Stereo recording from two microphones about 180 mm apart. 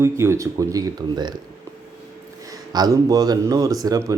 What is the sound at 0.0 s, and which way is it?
Speech, 15° right (ahead or behind).